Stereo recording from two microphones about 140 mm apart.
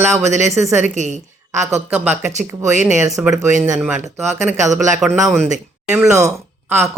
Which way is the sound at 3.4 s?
60° right (ahead or behind).